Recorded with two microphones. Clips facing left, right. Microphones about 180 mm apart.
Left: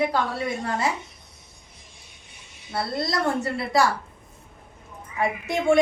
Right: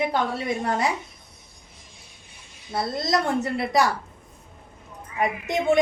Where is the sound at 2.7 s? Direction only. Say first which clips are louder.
Right 2 dB; 20° right (ahead or behind).